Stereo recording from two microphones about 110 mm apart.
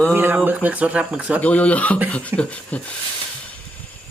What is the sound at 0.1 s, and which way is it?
Speech, 20° right (ahead or behind).